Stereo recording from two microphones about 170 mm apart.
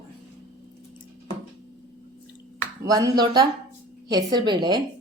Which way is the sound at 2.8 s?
20° right (ahead or behind).